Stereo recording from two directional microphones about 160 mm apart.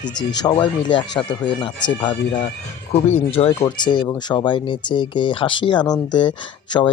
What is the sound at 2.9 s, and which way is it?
Speech, 40° left (ahead or behind).